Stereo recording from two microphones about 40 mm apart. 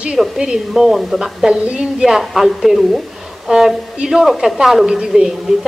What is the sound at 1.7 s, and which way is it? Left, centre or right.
Speech, right.